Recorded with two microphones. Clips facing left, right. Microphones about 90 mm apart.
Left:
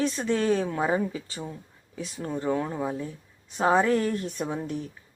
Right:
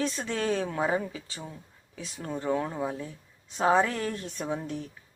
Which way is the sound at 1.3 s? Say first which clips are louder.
Left 5 dB; 5° left (ahead or behind).